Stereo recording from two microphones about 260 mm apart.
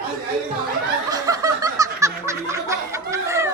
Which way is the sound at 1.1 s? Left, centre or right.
Centre.